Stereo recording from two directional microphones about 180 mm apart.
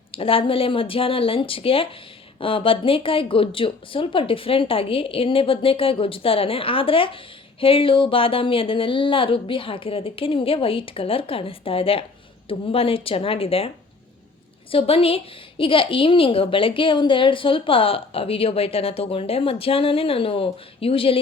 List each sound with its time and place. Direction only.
0.1 s a woman's voice: 30° left (ahead or behind)
14.7 s a woman's voice: 30° left (ahead or behind)